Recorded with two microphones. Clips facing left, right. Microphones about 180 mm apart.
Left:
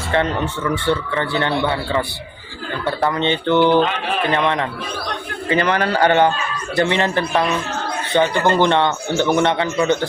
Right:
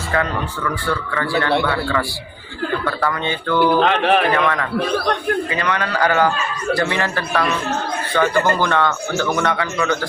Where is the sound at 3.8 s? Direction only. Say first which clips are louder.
Right 4 dB; 65° right (ahead or behind).